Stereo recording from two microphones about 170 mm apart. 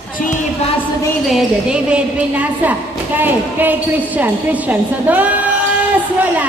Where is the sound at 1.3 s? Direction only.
5° right (ahead or behind).